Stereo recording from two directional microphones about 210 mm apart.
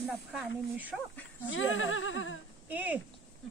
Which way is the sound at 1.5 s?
70° left (ahead or behind).